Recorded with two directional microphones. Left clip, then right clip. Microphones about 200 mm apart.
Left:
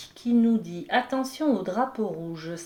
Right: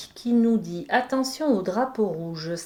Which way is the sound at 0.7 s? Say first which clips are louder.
Right 2 dB; 55° right (ahead or behind).